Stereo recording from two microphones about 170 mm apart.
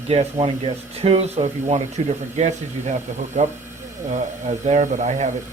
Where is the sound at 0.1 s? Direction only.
35° right (ahead or behind).